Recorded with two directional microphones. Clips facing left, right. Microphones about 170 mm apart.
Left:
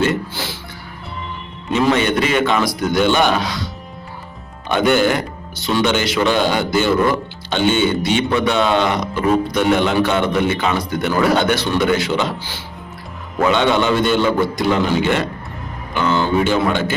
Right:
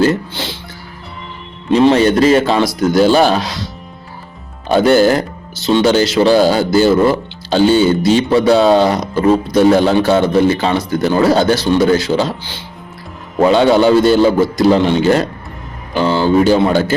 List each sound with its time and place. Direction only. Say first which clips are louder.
1.7 s speech: right 6 dB; 35° right (ahead or behind)
4.7 s speech: right 5 dB; 35° right (ahead or behind)
13.4 s speech: right 6 dB; 35° right (ahead or behind)